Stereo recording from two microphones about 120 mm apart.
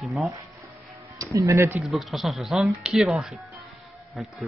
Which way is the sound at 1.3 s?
25° right (ahead or behind).